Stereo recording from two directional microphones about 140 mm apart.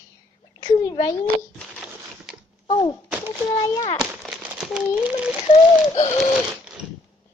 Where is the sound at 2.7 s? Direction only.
35° left (ahead or behind).